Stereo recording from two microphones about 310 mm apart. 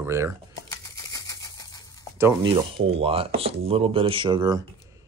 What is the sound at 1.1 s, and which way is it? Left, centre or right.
Typewriter, centre.